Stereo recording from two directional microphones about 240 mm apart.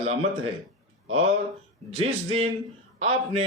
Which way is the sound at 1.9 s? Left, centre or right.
Right.